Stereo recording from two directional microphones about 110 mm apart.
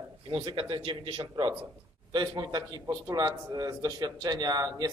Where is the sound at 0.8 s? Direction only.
50° right (ahead or behind).